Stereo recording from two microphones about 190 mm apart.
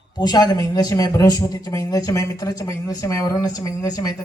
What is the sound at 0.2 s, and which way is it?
A man's voice, 20° left (ahead or behind).